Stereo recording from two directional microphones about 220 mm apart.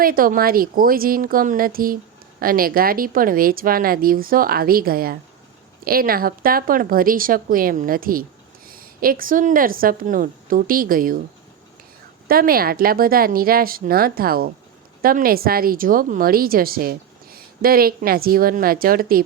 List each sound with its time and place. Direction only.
0.0 s a woman's voice: 40° right (ahead or behind)
12.3 s a woman's voice: 40° right (ahead or behind)